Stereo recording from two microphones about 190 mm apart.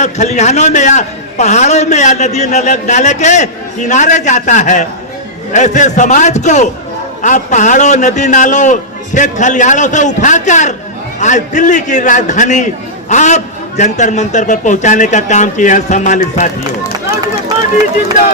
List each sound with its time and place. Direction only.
0.0 s a man's voice: 35° left (ahead or behind)